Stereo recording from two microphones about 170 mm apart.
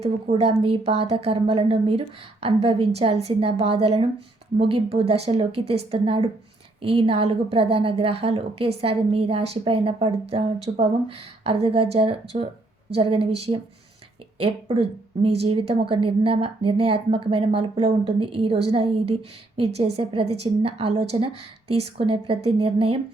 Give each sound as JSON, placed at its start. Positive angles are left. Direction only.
{"t": 0.0, "sound": "a woman's voice", "side_deg": -40}